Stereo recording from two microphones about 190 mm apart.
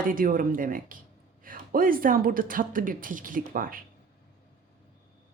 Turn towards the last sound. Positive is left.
turn(degrees=-50)  # may be behind; listen again after turning